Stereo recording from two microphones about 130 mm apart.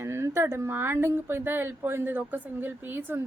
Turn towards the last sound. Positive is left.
turn(degrees=-15)  # may be behind; listen again after turning